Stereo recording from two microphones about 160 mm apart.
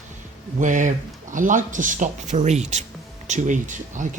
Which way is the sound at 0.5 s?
50° right (ahead or behind).